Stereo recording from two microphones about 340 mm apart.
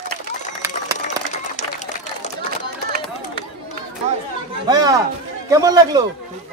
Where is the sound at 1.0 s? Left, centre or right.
Left.